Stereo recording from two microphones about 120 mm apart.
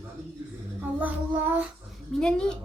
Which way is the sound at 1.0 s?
15° right (ahead or behind).